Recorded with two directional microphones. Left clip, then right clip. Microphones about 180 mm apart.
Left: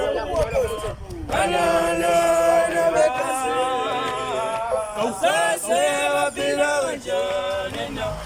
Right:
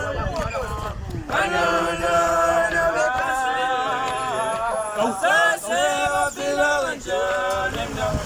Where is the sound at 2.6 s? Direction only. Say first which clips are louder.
Left 2 dB; 20° left (ahead or behind).